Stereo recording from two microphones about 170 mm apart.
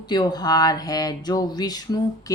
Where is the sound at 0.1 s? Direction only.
25° left (ahead or behind).